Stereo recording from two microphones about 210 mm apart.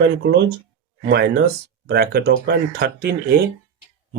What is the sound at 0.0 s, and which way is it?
Speech, 55° right (ahead or behind).